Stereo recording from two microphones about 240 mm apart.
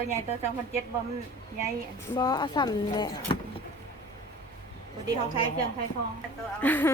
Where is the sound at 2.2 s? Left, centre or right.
Centre.